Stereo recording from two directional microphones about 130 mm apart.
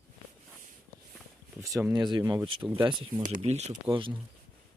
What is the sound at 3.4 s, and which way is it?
Speech, 60° right (ahead or behind).